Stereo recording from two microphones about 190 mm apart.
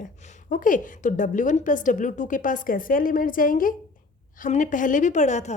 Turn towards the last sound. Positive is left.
turn(degrees=40)  # may be behind; listen again after turning